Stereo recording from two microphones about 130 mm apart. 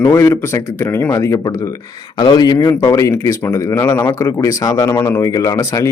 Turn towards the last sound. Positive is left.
turn(degrees=25)  # may be behind; listen again after turning